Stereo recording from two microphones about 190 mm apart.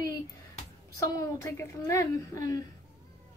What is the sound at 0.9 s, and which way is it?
Speech, 15° left (ahead or behind).